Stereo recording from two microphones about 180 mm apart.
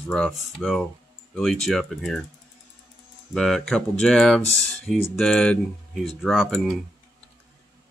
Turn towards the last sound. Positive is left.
turn(degrees=0)  # may be behind; listen again after turning